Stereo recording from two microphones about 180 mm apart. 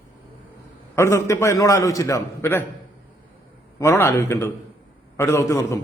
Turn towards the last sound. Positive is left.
turn(degrees=15)  # may be behind; listen again after turning